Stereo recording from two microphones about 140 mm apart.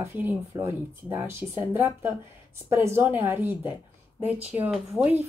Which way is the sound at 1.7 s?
15° right (ahead or behind).